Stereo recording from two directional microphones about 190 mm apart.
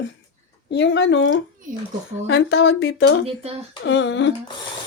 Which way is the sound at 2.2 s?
60° left (ahead or behind).